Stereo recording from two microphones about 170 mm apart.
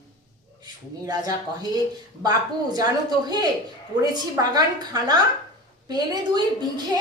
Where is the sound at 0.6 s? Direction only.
25° right (ahead or behind).